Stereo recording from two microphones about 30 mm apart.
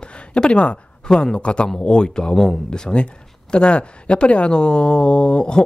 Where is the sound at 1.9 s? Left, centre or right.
Left.